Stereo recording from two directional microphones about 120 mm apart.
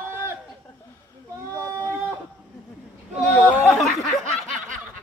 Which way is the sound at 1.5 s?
25° right (ahead or behind).